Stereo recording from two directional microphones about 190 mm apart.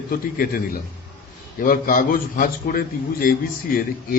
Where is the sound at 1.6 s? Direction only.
50° left (ahead or behind).